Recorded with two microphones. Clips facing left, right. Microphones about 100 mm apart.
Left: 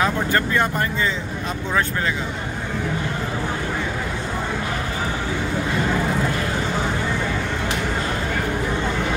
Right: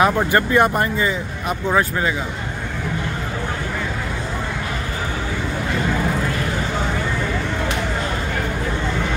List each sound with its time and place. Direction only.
0.0 s speech: 15° right (ahead or behind)